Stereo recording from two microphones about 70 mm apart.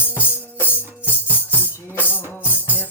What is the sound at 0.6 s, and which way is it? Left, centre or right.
Music, left.